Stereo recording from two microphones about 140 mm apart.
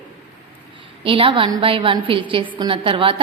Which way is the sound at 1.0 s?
40° right (ahead or behind).